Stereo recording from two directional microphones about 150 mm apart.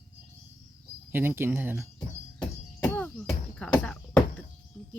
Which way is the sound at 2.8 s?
10° left (ahead or behind).